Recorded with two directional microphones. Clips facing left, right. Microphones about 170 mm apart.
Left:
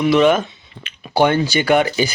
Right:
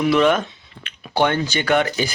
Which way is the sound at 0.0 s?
Centre (ahead or behind).